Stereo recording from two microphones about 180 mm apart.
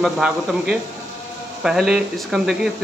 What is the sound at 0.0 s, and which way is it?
A man's voice, 5° right (ahead or behind).